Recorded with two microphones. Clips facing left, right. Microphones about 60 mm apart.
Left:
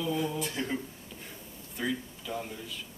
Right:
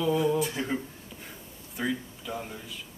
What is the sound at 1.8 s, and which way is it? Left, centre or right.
Speech, centre.